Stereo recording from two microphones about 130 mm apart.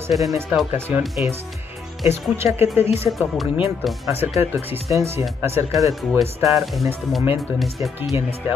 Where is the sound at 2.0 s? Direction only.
20° right (ahead or behind).